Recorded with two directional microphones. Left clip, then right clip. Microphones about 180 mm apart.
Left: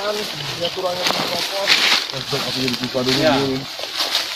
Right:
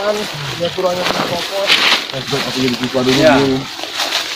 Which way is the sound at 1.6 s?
15° left (ahead or behind).